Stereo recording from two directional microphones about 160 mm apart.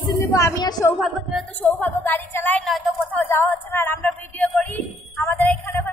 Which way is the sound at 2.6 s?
Centre (ahead or behind).